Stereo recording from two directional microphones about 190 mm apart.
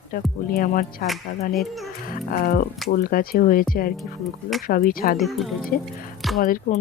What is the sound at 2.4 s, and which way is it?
Speech, 50° left (ahead or behind).